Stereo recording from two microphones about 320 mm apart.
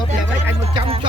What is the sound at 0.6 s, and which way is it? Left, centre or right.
Music, centre.